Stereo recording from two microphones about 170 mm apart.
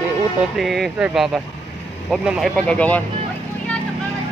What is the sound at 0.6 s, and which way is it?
Speech, centre (ahead or behind).